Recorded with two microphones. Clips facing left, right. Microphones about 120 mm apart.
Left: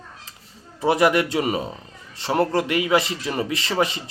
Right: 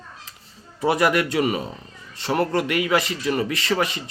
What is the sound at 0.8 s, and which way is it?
Speech, 25° left (ahead or behind).